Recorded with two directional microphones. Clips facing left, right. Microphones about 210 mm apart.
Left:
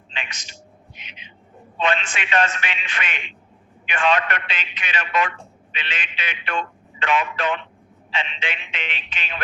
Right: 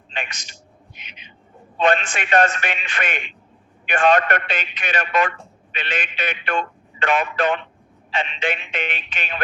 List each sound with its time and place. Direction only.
1.8 s a man's voice: 45° right (ahead or behind)